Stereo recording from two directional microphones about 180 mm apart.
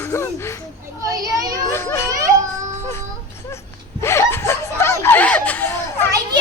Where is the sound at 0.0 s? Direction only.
15° left (ahead or behind).